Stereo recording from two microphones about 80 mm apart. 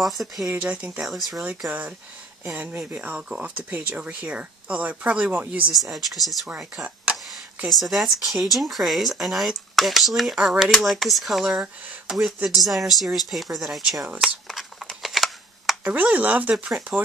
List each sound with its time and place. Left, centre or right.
0.0 s speech: centre
0.5 s speech: centre
1.0 s speech: centre
1.7 s speech: centre
5.7 s speech: centre
6.5 s speech: centre
7.2 s speech: centre
14.2 s a sound: centre
15.8 s speech: centre